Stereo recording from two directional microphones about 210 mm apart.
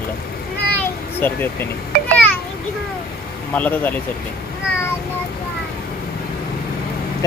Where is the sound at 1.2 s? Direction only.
10° left (ahead or behind).